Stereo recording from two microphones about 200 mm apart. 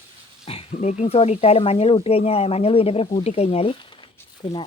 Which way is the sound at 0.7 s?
35° left (ahead or behind).